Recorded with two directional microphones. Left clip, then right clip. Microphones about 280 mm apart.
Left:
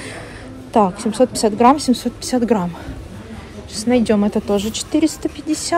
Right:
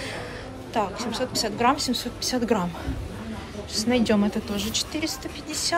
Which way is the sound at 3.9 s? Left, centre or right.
Centre.